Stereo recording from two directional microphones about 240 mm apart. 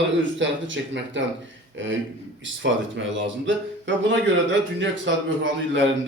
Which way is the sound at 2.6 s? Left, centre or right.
Right.